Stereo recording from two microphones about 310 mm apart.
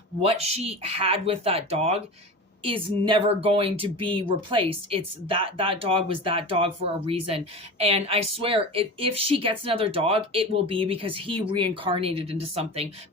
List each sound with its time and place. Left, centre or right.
0.2 s speech: centre
3.0 s speech: centre